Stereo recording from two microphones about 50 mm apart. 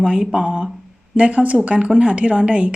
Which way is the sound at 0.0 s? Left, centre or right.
Centre.